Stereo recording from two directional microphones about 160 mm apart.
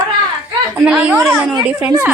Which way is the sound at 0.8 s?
5° right (ahead or behind).